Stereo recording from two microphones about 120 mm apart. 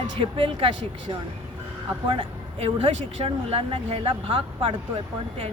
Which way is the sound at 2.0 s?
50° right (ahead or behind).